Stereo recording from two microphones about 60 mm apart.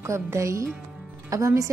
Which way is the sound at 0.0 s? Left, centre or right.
Right.